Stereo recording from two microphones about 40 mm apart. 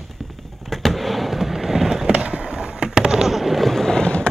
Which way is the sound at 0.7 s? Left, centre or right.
Centre.